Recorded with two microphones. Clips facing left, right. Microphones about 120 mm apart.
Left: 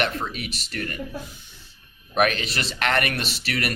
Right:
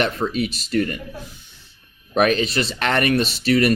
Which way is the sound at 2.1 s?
25° right (ahead or behind).